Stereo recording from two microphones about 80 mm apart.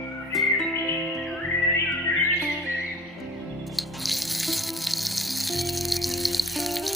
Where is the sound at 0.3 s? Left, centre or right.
Centre.